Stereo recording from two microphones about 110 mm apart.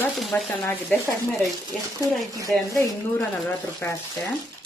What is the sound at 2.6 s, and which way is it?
Speech, 30° left (ahead or behind).